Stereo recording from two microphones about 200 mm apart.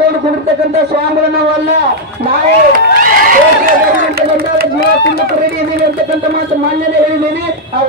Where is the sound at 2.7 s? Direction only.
45° right (ahead or behind).